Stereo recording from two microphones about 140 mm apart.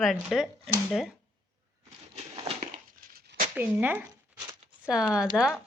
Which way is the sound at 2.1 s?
45° right (ahead or behind).